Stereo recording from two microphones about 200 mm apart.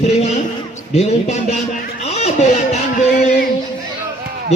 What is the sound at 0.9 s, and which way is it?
Speech, 30° left (ahead or behind).